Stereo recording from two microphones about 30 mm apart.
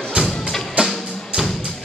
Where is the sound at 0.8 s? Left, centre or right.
Right.